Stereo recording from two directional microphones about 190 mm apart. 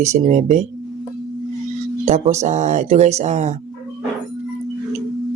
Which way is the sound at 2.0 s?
35° right (ahead or behind).